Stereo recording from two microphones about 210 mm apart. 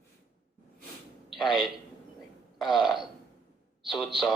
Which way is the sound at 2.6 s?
Centre (ahead or behind).